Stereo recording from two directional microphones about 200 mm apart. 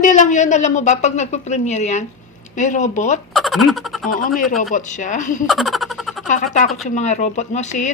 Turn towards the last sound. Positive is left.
turn(degrees=35)  # may be behind; listen again after turning